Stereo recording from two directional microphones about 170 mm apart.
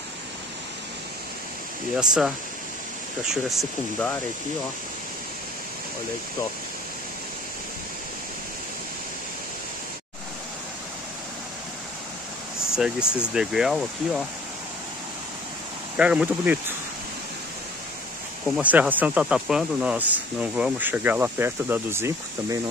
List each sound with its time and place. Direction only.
2.0 s speech: 5° right (ahead or behind)
12.7 s speech: 5° right (ahead or behind)
16.0 s speech: 5° right (ahead or behind)
18.5 s speech: 10° right (ahead or behind)